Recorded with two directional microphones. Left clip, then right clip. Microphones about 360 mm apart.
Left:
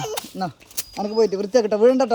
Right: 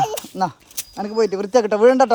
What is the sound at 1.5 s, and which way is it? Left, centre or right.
Speech, centre.